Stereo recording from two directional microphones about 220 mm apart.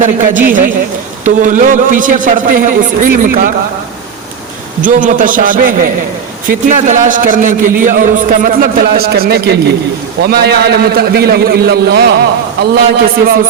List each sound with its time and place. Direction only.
0.0 s a man's voice: 35° right (ahead or behind)
4.8 s a man's voice: 35° right (ahead or behind)